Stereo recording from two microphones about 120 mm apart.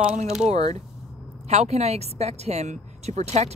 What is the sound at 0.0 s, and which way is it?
Speech, 80° right.